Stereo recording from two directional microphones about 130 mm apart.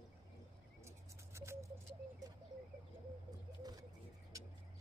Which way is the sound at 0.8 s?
20° right (ahead or behind).